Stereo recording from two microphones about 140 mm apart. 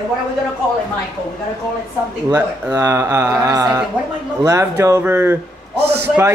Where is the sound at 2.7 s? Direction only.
20° right (ahead or behind).